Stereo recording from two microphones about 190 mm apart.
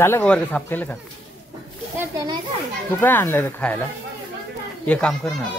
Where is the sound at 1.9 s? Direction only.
20° right (ahead or behind).